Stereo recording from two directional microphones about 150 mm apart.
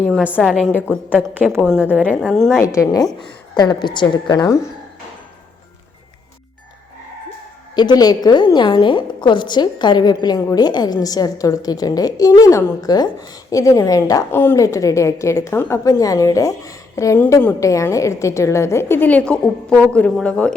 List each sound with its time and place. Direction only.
0.2 s a woman's voice: 10° right (ahead or behind)
0.6 s a woman's voice: 10° left (ahead or behind)
0.9 s a woman's voice: 10° right (ahead or behind)
2.7 s a woman's voice: 25° left (ahead or behind)
7.8 s a woman's voice: 25° left (ahead or behind); by 20.6 s 5° left (ahead or behind)